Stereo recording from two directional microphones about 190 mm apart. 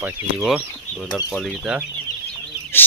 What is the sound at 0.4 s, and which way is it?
Speech, centre (ahead or behind).